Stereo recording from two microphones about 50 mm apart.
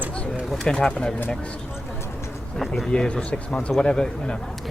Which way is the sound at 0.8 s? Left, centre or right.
Centre.